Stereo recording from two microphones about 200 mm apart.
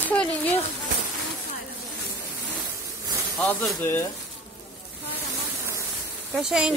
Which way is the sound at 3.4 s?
5° left (ahead or behind).